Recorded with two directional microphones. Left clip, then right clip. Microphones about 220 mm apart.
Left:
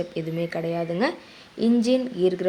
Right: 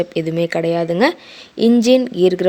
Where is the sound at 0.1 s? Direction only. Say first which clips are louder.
Right 10 dB; 40° right (ahead or behind).